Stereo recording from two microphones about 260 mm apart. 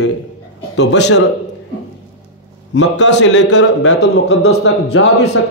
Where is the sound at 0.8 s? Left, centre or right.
Left.